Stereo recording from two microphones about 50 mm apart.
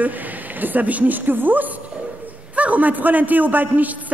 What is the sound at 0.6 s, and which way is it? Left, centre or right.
A woman's voice, right.